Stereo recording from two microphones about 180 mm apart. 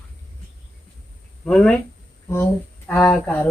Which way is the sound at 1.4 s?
5° left (ahead or behind).